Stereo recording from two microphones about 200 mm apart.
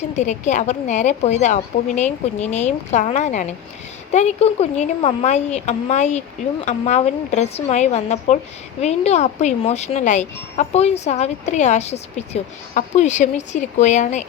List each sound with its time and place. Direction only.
0.2 s speech: 35° left (ahead or behind)